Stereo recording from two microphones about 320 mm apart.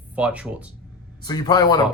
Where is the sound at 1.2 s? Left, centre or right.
Centre.